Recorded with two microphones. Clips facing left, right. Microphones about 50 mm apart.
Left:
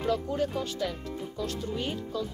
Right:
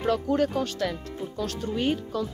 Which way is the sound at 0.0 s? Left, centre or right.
Right.